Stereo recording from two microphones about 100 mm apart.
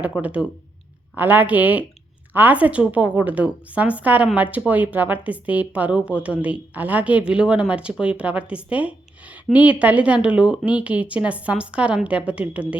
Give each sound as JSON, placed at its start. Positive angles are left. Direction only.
{"t": 0.2, "sound": "a woman's voice", "side_deg": -15}